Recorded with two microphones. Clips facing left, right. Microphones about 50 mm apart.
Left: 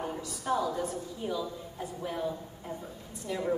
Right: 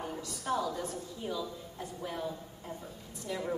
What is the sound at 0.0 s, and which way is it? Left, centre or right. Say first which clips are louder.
A woman's voice: left 3 dB; centre.